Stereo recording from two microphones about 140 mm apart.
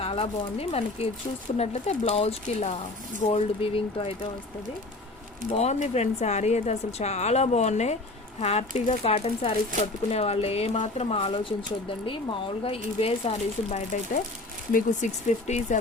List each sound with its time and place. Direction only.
0.0 s speech: 45° left (ahead or behind)
5.5 s speech: 55° left (ahead or behind)